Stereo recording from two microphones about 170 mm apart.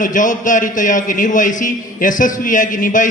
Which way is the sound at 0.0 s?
50° left (ahead or behind).